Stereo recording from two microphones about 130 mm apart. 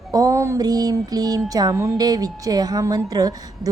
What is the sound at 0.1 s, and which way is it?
Music, 25° right (ahead or behind).